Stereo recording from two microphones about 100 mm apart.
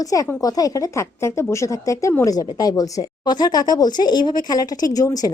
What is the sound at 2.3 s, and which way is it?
Speech, 40° left (ahead or behind).